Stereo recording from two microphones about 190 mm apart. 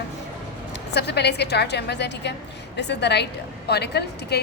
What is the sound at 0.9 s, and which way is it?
A woman's voice, 60° left (ahead or behind).